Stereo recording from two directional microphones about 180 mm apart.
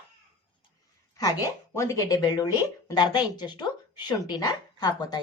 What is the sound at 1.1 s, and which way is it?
Speech, 20° left (ahead or behind).